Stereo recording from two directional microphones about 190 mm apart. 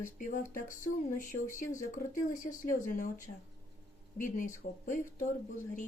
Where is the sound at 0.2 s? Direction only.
45° left (ahead or behind).